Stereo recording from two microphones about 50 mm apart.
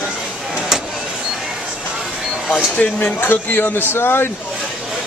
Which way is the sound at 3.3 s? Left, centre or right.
Left.